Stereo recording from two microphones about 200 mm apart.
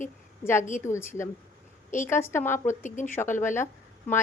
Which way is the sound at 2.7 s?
40° left (ahead or behind).